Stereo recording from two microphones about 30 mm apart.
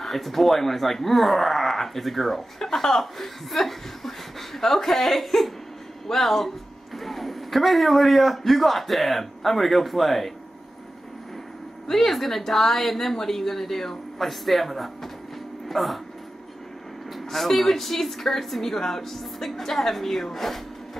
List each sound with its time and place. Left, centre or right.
0.0 s a woman's voice: centre
11.9 s a woman's voice: centre
17.1 s a woman's voice: centre